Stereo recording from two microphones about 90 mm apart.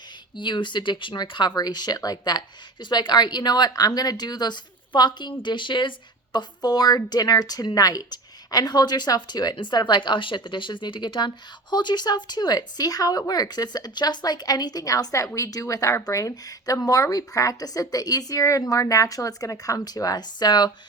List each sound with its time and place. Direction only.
0.3 s a woman's voice: 60° left (ahead or behind)
6.3 s a woman's voice: 50° left (ahead or behind)